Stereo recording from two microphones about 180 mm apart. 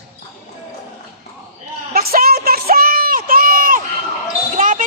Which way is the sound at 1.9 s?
55° right (ahead or behind).